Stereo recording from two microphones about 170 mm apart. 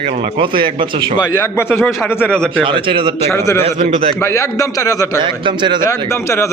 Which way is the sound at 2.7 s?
30° right (ahead or behind).